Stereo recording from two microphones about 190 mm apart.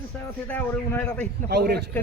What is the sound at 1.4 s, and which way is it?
Speech, 55° right (ahead or behind).